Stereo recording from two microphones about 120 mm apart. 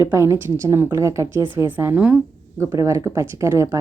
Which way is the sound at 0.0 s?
25° right (ahead or behind).